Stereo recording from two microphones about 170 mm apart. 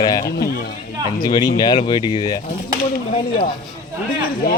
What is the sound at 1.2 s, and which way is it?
Speech, 25° left (ahead or behind).